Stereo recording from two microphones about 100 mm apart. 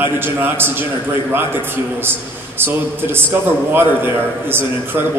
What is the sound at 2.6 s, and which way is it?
A man's voice, 20° right (ahead or behind).